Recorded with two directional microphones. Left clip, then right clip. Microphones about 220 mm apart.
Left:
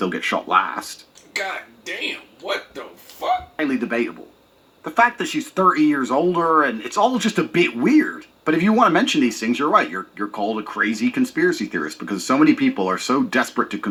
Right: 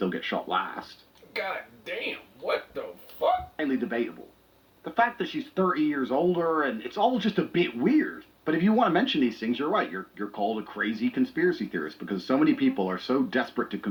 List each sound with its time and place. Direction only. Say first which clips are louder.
0.0 s speech: left 7 dB; 45° left (ahead or behind)
3.6 s speech: left 7 dB; 45° left (ahead or behind)